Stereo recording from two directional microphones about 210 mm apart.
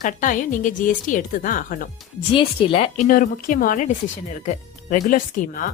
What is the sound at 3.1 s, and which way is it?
Speech, 40° left (ahead or behind).